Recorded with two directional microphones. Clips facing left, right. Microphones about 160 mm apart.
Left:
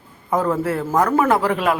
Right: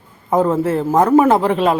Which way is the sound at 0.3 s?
25° right (ahead or behind).